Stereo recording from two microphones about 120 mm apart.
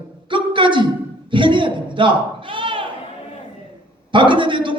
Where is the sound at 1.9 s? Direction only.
45° right (ahead or behind).